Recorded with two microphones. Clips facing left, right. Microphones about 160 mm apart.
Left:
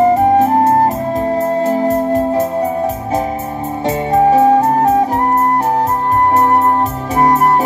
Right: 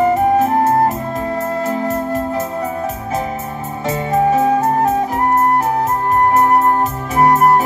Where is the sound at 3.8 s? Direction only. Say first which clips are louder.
Left 3 dB; 35° left (ahead or behind).